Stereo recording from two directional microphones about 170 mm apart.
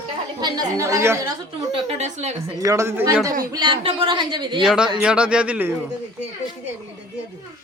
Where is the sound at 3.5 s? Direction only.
25° right (ahead or behind).